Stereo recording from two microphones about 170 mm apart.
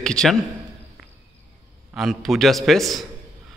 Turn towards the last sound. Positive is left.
turn(degrees=0)  # may be behind; listen again after turning